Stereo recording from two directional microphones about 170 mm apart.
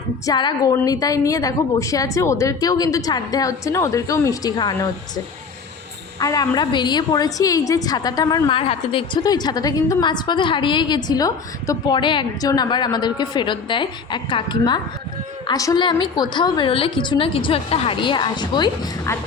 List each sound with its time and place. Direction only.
0.3 s a woman's voice: 25° left (ahead or behind)